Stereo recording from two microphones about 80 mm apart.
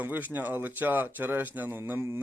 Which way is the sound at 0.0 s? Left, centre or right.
Right.